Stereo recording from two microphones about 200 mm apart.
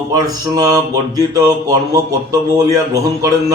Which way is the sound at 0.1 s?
20° right (ahead or behind).